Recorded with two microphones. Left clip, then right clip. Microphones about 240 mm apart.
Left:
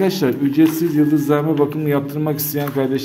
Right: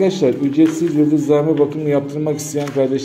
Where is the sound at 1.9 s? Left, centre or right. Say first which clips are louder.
Right 2 dB; left.